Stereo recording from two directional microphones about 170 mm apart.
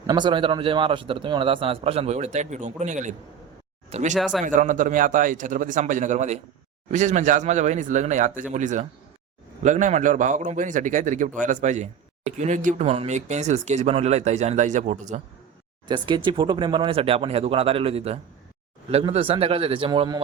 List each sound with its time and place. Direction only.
0.1 s a man's voice: 25° right (ahead or behind)
4.1 s speech: centre (ahead or behind)
4.4 s a man's voice: 50° right (ahead or behind)
15.9 s a man's voice: 25° right (ahead or behind)